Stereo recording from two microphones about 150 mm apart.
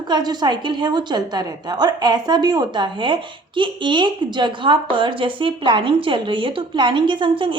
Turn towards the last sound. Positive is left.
turn(degrees=-35)  # may be behind; listen again after turning